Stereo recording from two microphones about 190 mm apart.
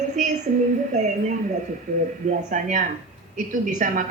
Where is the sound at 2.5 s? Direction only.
40° right (ahead or behind).